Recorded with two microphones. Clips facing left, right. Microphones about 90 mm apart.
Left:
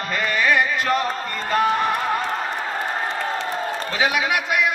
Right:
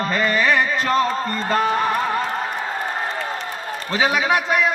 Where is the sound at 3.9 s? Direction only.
35° right (ahead or behind).